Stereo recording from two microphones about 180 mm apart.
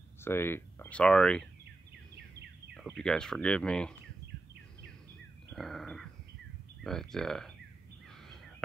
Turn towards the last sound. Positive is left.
turn(degrees=0)  # may be behind; listen again after turning